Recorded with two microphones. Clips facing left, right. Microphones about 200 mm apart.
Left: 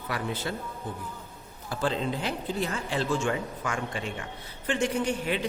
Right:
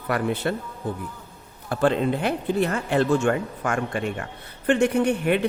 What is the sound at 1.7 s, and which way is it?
Speech, 60° right (ahead or behind).